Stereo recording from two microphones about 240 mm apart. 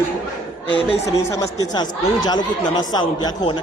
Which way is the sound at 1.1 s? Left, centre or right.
Centre.